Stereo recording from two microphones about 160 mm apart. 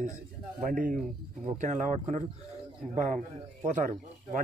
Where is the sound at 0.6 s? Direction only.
55° right (ahead or behind).